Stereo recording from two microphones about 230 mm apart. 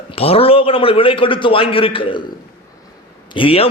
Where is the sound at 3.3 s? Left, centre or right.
Left.